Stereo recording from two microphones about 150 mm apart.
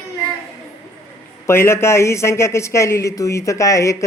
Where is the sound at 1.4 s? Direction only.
15° left (ahead or behind).